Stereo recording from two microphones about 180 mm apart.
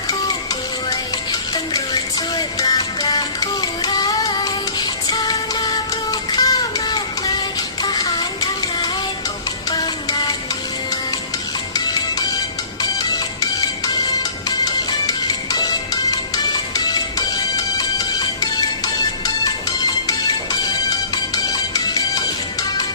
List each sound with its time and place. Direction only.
0.9 s music: 20° left (ahead or behind)
12.8 s music: 20° left (ahead or behind)